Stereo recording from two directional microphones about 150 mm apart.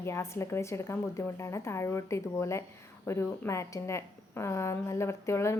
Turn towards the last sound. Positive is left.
turn(degrees=20)  # may be behind; listen again after turning